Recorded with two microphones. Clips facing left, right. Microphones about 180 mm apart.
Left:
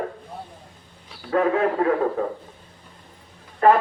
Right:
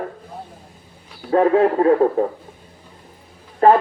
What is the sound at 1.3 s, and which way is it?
Speech, 35° right (ahead or behind).